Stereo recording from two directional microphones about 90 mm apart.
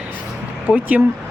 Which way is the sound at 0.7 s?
15° right (ahead or behind).